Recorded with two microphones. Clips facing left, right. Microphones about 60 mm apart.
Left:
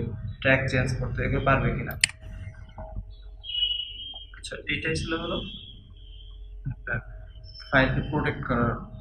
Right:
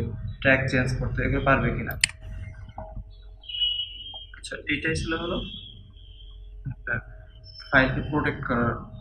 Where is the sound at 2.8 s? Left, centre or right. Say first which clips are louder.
Right 3 dB; right.